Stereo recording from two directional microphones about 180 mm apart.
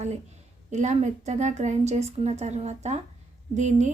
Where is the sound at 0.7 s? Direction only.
40° right (ahead or behind).